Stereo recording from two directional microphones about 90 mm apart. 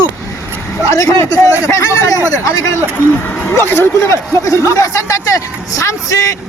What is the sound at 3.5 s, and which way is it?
Speech, 25° left (ahead or behind).